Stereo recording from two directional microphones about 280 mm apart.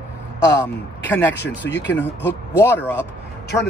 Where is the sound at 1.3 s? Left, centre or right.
Left.